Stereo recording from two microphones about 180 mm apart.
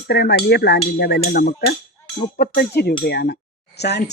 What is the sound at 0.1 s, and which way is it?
Speech, 65° left (ahead or behind).